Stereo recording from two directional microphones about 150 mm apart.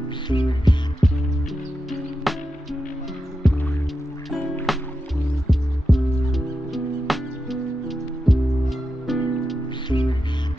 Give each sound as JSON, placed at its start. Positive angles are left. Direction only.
{"t": 0.3, "sound": "music", "side_deg": 30}
{"t": 1.0, "sound": "music", "side_deg": 0}
{"t": 2.3, "sound": "music", "side_deg": 0}
{"t": 3.4, "sound": "music", "side_deg": 0}
{"t": 4.7, "sound": "music", "side_deg": 0}
{"t": 9.8, "sound": "music", "side_deg": 30}